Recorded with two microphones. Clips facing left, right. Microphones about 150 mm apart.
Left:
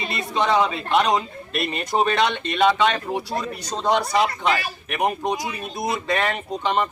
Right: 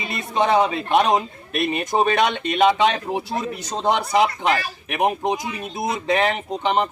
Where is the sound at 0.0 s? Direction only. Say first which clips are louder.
Right 2 dB; 20° right (ahead or behind).